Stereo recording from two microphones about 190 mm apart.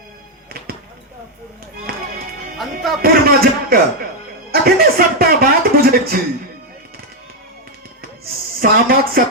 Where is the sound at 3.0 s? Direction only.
50° right (ahead or behind).